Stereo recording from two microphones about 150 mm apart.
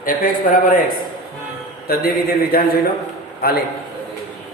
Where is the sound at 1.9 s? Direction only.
90° left.